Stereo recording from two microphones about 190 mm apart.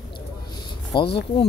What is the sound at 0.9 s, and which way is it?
Speech, 25° left (ahead or behind).